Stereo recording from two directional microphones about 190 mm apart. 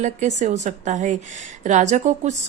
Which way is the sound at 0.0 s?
40° right (ahead or behind).